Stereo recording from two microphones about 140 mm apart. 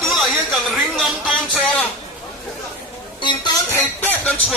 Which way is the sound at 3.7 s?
10° left (ahead or behind).